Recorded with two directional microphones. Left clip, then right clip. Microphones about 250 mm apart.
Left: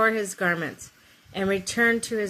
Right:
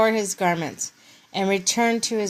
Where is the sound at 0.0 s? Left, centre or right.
Centre.